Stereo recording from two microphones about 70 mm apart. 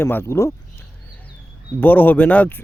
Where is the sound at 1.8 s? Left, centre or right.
Left.